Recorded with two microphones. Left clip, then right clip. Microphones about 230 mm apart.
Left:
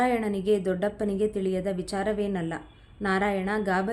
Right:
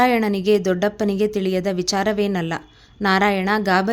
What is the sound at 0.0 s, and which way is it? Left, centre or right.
A woman's voice, right.